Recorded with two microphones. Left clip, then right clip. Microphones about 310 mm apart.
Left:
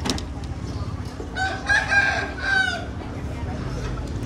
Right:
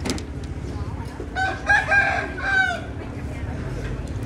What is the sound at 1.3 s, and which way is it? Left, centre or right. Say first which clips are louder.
Chicken: right 2 dB; centre.